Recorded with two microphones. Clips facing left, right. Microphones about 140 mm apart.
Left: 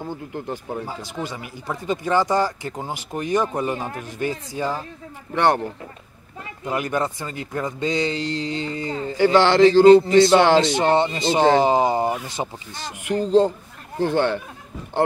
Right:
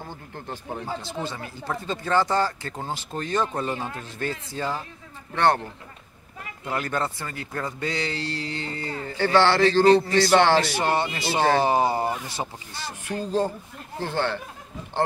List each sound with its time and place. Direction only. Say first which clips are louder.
0.0 s speech: left 8 dB; 15° left (ahead or behind)